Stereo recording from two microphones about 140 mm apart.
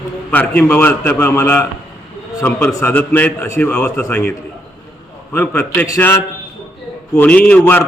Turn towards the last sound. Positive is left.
turn(degrees=15)  # may be behind; listen again after turning